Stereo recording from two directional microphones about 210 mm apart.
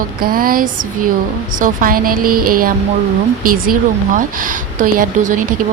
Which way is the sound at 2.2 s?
90° right.